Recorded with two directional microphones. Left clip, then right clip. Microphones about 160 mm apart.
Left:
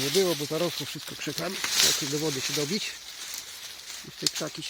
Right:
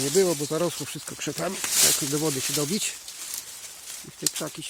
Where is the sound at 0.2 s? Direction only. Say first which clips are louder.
Right 4 dB; 35° right (ahead or behind).